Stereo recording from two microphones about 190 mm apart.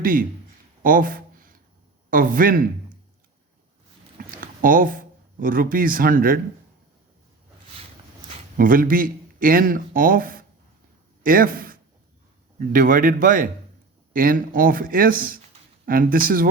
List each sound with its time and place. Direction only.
0.0 s speech: 45° right (ahead or behind)
0.8 s a sound: 45° right (ahead or behind)
2.0 s speech: 45° right (ahead or behind)
4.2 s speech: 45° right (ahead or behind)
8.5 s speech: 45° right (ahead or behind)